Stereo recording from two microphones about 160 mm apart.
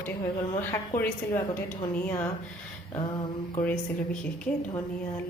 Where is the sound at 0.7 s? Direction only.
15° left (ahead or behind).